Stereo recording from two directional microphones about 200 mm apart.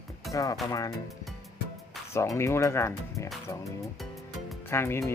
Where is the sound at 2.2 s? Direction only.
15° left (ahead or behind).